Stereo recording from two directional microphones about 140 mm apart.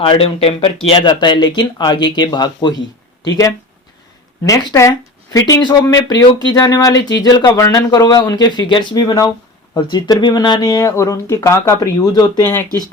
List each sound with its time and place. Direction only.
0.0 s speech: 40° left (ahead or behind); by 12.5 s 25° left (ahead or behind)